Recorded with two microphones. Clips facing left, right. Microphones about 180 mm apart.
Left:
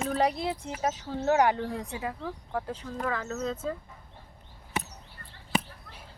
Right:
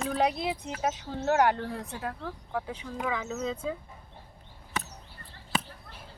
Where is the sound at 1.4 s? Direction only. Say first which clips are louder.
Even; 5° left (ahead or behind).